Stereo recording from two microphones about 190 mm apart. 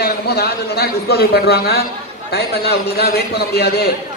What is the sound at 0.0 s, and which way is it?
A man's voice, 55° left (ahead or behind).